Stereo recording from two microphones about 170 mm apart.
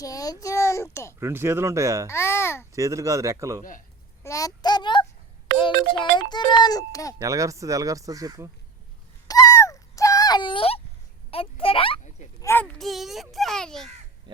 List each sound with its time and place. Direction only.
0.0 s a child's voice: 20° left (ahead or behind)
1.2 s speech: 15° right (ahead or behind)
2.0 s a child's voice: 15° left (ahead or behind)
2.7 s speech: 20° right (ahead or behind)
4.2 s a sound: 20° left (ahead or behind)
5.5 s ringtone: 90° right
6.1 s a child's voice: 25° left (ahead or behind)
7.2 s speech: 20° right (ahead or behind)
9.2 s a sound: 20° left (ahead or behind)
11.3 s a child's voice: 35° left (ahead or behind)
12.4 s a child's voice: 10° left (ahead or behind)